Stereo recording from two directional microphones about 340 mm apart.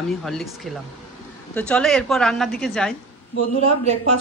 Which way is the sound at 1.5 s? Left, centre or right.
Centre.